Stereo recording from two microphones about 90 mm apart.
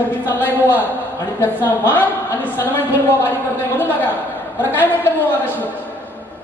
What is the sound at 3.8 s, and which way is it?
Speech, 20° left (ahead or behind).